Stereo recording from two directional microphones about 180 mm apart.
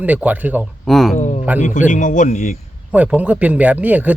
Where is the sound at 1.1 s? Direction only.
40° left (ahead or behind).